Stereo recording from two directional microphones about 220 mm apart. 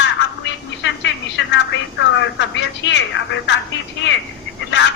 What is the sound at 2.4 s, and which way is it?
Speech, 55° left (ahead or behind).